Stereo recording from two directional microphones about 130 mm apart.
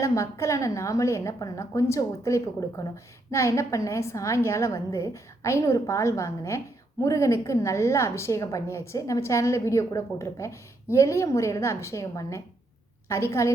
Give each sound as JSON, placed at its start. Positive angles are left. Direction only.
{"t": 0.0, "sound": "a woman's voice", "side_deg": 20}